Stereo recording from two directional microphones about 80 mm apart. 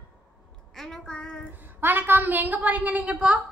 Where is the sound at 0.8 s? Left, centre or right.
Centre.